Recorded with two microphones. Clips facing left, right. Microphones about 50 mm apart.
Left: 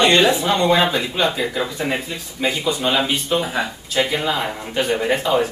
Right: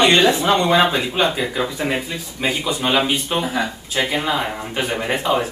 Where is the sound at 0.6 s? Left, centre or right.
Centre.